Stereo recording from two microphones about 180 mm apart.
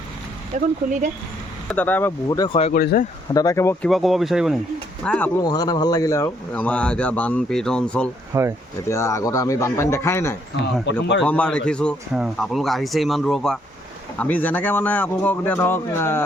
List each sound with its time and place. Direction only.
0.5 s speech: 45° right (ahead or behind)
1.7 s speech: 10° left (ahead or behind)
2.7 s speech: 55° left (ahead or behind)
3.3 s speech: 15° left (ahead or behind)
3.8 s speech: centre (ahead or behind)
5.4 s speech: 20° left (ahead or behind); by 8.1 s 5° left (ahead or behind)
8.3 s speech: 15° right (ahead or behind)
8.9 s speech: 15° left (ahead or behind)
10.9 s a man's voice: 80° left
11.2 s speech: 5° left (ahead or behind)